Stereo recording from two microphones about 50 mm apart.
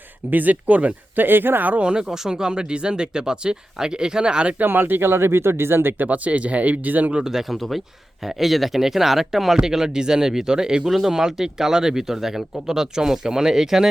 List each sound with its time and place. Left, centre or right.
0.3 s speech: right
1.2 s speech: right
1.8 s speech: centre
4.6 s speech: right
6.1 s speech: right
7.1 s speech: centre